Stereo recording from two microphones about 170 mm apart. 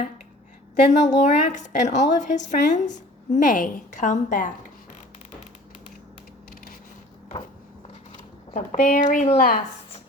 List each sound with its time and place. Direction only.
0.8 s a woman's voice: 45° left (ahead or behind)
8.5 s a woman's voice: 50° left (ahead or behind)